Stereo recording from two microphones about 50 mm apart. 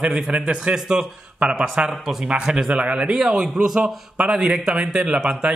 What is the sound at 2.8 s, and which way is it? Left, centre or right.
Speech, right.